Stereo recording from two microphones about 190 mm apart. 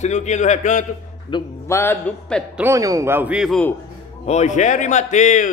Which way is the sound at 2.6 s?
15° right (ahead or behind).